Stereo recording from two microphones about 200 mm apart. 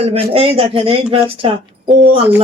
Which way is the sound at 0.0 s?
30° right (ahead or behind).